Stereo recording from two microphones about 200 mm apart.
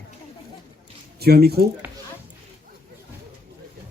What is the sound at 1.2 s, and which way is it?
Speech, 50° right (ahead or behind).